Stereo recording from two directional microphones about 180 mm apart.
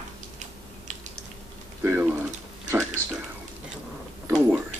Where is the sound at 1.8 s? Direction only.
10° right (ahead or behind).